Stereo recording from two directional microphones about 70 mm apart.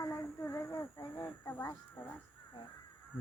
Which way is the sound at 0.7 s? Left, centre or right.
Left.